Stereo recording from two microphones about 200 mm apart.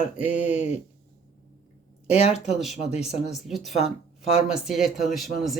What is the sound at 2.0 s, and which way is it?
Speech, 30° left (ahead or behind).